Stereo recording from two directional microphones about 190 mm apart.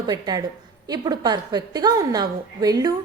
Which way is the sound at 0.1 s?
20° right (ahead or behind).